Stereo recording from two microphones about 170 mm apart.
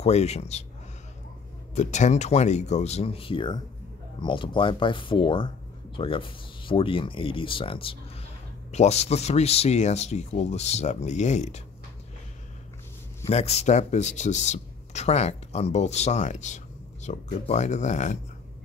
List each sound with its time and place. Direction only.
0.0 s speech: 40° left (ahead or behind)
1.8 s speech: 45° left (ahead or behind)
13.3 s speech: 40° left (ahead or behind)